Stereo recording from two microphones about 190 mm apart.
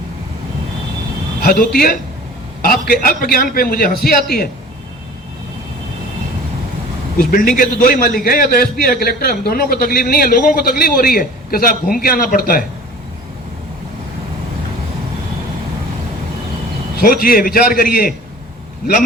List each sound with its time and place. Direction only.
1.5 s a man's voice: 50° left (ahead or behind)
7.2 s a man's voice: 50° left (ahead or behind)
17.0 s a man's voice: 50° left (ahead or behind)